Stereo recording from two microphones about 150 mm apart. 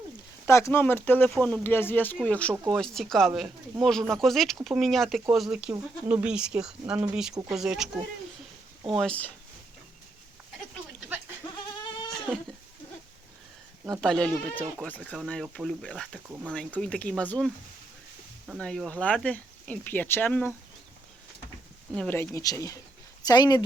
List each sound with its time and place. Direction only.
0.4 s speech: 15° left (ahead or behind); by 7.9 s 5° right (ahead or behind)
9.0 s speech: 10° left (ahead or behind)
14.0 s speech: 5° left (ahead or behind)
21.9 s speech: 10° left (ahead or behind); by 23.6 s 25° left (ahead or behind)